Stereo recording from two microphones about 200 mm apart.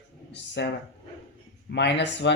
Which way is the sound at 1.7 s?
60° left (ahead or behind).